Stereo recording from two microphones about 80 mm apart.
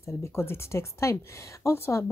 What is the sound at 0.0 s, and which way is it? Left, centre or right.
Speech, left.